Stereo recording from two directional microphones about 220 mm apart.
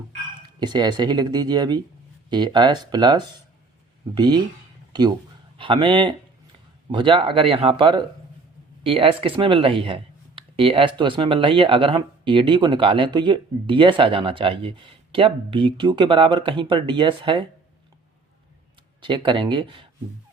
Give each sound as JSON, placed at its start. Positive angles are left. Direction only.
{"t": 0.6, "sound": "speech", "side_deg": -20}
{"t": 19.0, "sound": "speech", "side_deg": -20}